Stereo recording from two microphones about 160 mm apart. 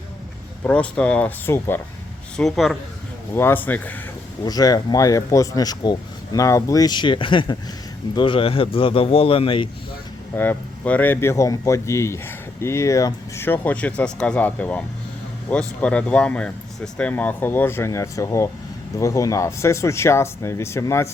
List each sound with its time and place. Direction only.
0.6 s speech: 10° left (ahead or behind)
2.3 s a man's voice: centre (ahead or behind)
3.3 s speech: 15° left (ahead or behind)
4.4 s a man's voice: 25° left (ahead or behind)
10.3 s speech: 15° left (ahead or behind)